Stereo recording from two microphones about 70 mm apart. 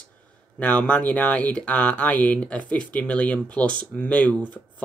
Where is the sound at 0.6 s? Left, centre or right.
Centre.